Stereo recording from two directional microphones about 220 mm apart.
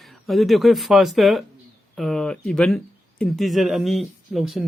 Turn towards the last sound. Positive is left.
turn(degrees=0)  # may be behind; listen again after turning